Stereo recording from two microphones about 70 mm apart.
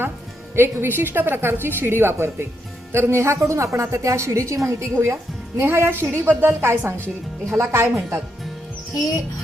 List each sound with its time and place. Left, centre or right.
0.5 s a woman's voice: right